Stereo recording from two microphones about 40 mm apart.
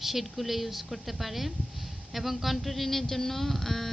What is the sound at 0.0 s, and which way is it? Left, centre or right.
Speech, centre.